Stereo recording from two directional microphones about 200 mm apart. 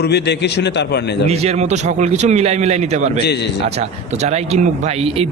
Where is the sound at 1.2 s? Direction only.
35° right (ahead or behind).